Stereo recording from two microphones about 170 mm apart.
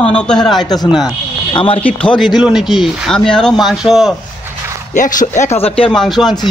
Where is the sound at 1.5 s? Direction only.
30° left (ahead or behind).